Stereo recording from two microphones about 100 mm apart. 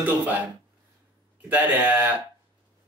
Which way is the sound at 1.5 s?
15° right (ahead or behind).